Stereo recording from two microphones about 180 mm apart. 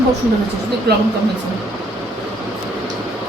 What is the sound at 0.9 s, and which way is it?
Speech, 65° right (ahead or behind).